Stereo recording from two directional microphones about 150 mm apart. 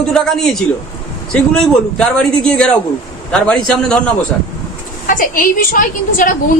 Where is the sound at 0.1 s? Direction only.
5° left (ahead or behind).